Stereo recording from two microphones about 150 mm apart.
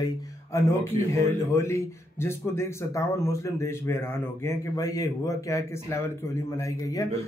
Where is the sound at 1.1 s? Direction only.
20° left (ahead or behind).